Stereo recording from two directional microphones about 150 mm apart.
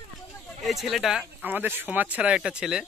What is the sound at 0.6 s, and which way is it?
Speech, centre (ahead or behind).